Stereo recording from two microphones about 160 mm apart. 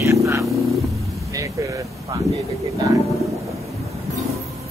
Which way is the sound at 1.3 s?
20° right (ahead or behind).